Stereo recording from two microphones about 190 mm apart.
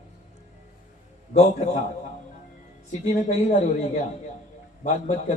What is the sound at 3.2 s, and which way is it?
A man's voice, 40° left (ahead or behind).